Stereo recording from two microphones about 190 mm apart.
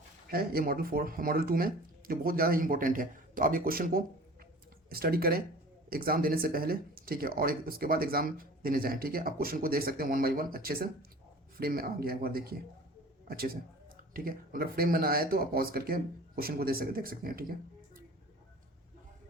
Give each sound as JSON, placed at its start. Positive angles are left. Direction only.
{"t": 0.3, "sound": "speech", "side_deg": -50}